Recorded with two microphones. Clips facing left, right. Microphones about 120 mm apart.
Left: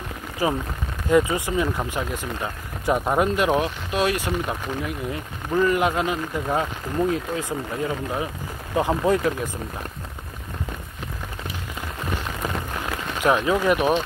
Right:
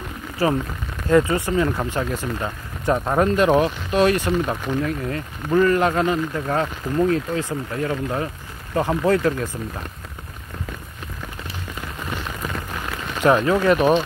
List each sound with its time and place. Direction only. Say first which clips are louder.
0.4 s speech: right 3 dB; 15° left (ahead or behind)
13.2 s speech: right 3 dB; 10° left (ahead or behind)